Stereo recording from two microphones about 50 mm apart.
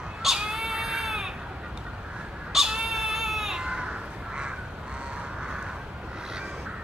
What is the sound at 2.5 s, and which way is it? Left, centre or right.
Cat, centre.